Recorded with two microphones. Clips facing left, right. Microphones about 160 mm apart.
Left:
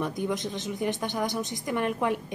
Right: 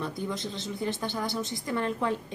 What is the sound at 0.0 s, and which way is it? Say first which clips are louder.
Speech: left 4 dB; 15° left (ahead or behind).